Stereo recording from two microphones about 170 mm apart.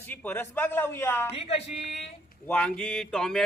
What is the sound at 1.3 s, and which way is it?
Speech, 35° left (ahead or behind).